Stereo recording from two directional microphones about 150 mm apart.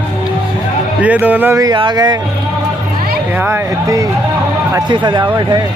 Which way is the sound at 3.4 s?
20° right (ahead or behind).